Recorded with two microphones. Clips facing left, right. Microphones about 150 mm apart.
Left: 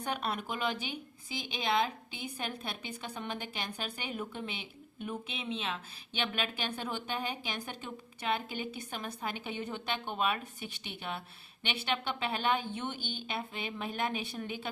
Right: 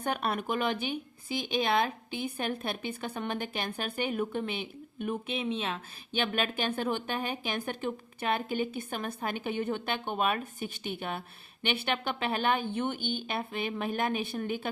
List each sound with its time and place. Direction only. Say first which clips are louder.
0.0 s a woman's voice: right 4 dB; 55° right (ahead or behind)